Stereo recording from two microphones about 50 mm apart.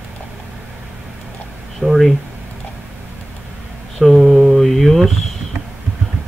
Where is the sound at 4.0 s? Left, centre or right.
Centre.